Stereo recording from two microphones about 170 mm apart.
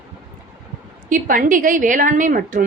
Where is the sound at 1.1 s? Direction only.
50° right (ahead or behind).